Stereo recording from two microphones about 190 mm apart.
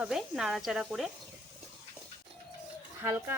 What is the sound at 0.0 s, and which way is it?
Speech, 5° right (ahead or behind).